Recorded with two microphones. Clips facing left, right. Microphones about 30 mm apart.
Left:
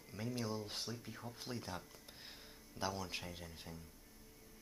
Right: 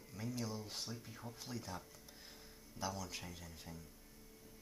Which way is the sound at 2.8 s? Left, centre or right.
Left.